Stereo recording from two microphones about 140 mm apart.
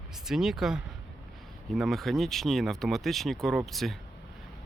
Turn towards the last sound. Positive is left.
turn(degrees=0)  # may be behind; listen again after turning